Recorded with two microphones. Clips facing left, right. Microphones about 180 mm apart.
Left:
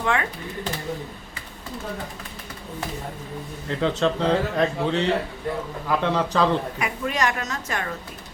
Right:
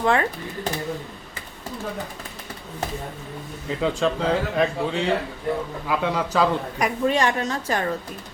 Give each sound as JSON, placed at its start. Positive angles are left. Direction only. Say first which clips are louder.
{"t": 0.0, "sound": "a woman's voice", "louder": "right 4 dB", "side_deg": -35}
{"t": 3.7, "sound": "speech", "louder": "even", "side_deg": -5}
{"t": 6.7, "sound": "a woman's voice", "louder": "right 5 dB", "side_deg": -35}